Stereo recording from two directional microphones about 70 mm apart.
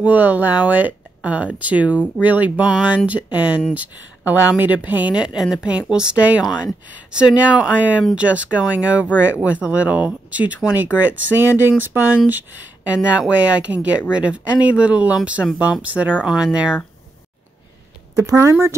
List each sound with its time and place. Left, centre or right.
0.0 s speech: right
5.1 s speech: centre
16.3 s speech: centre
18.2 s speech: right